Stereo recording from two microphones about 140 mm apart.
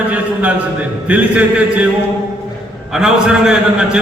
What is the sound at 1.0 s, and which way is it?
Speech, 10° right (ahead or behind).